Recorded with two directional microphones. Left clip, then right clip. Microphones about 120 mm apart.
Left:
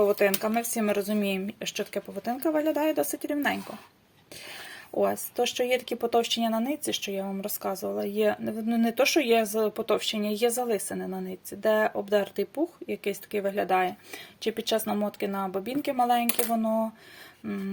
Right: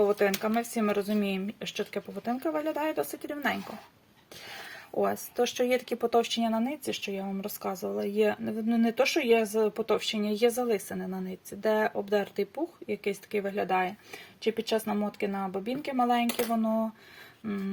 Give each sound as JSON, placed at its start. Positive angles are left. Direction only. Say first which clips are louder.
{"t": 0.0, "sound": "speech", "louder": "left 2 dB", "side_deg": 25}